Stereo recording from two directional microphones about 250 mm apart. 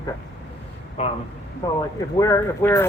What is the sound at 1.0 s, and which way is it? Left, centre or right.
Speech, left.